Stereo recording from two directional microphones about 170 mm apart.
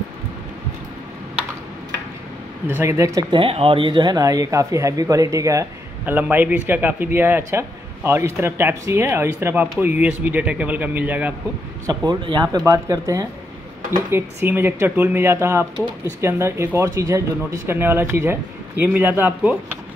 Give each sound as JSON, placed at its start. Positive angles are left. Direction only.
{"t": 2.7, "sound": "speech", "side_deg": -15}
{"t": 11.8, "sound": "speech", "side_deg": -25}